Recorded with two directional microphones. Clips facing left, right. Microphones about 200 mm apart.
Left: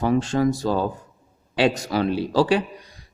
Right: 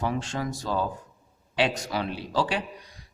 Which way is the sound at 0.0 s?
40° left (ahead or behind).